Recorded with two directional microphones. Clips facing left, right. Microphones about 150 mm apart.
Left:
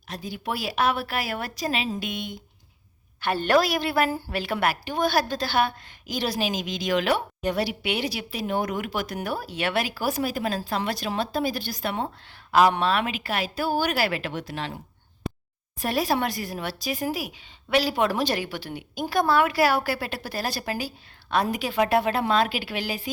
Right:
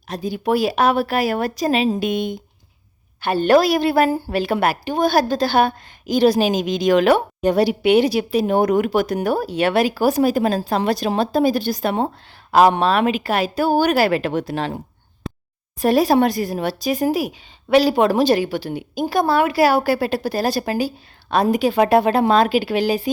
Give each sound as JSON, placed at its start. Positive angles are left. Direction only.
{"t": 0.1, "sound": "a woman's voice", "side_deg": -40}
{"t": 3.2, "sound": "a woman's voice", "side_deg": -30}
{"t": 15.8, "sound": "a woman's voice", "side_deg": -40}